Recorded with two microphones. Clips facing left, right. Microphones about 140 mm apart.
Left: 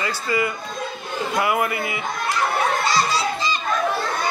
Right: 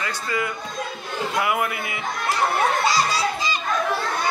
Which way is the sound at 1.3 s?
Centre (ahead or behind).